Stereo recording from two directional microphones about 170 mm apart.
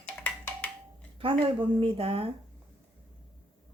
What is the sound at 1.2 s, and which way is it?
Speech, 30° right (ahead or behind).